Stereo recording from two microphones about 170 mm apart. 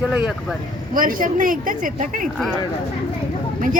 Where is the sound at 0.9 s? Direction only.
55° right (ahead or behind).